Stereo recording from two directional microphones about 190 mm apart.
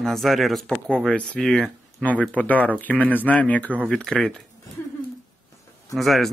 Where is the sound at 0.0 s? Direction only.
Centre (ahead or behind).